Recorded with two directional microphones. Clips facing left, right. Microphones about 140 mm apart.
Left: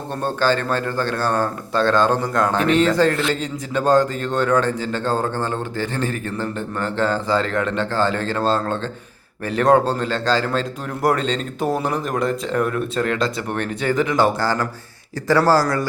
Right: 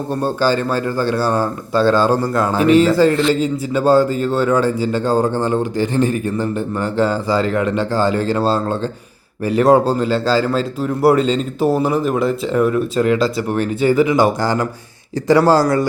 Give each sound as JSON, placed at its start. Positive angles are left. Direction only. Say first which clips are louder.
{"t": 0.2, "sound": "a man's voice", "louder": "right 2 dB", "side_deg": -10}